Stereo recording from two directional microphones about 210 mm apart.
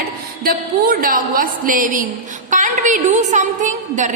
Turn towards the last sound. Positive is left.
turn(degrees=-35)  # may be behind; listen again after turning